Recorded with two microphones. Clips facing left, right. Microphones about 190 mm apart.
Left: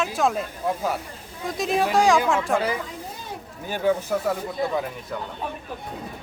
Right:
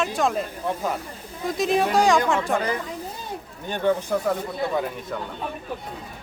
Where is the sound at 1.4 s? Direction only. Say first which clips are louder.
Right 2 dB; centre (ahead or behind).